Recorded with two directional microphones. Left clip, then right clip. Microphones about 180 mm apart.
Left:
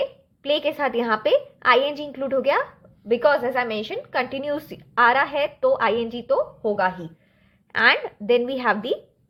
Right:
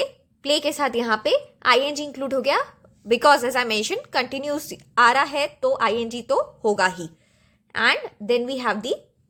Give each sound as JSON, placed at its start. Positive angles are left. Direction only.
{"t": 0.4, "sound": "a woman's voice", "side_deg": -30}
{"t": 3.1, "sound": "a woman's voice", "side_deg": -45}
{"t": 4.2, "sound": "a woman's voice", "side_deg": -25}
{"t": 6.2, "sound": "a woman's voice", "side_deg": -45}
{"t": 7.7, "sound": "a woman's voice", "side_deg": -20}